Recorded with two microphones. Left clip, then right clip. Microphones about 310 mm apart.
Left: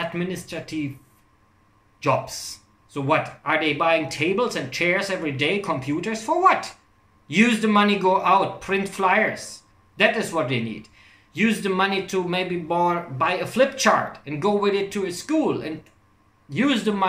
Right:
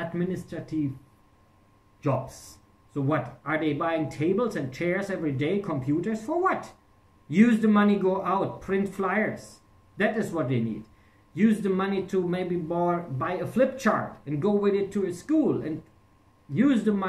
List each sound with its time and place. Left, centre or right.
0.0 s speech: left
2.9 s speech: left